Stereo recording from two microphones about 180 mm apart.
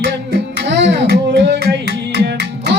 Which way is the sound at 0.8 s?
75° right (ahead or behind).